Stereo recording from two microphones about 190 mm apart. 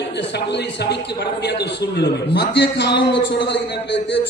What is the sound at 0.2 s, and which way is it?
A man's voice, 65° left (ahead or behind).